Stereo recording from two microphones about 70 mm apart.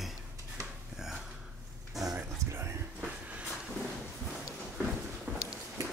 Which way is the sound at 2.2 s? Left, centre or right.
Right.